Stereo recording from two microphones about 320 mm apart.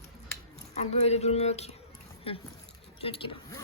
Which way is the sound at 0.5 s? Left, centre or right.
Centre.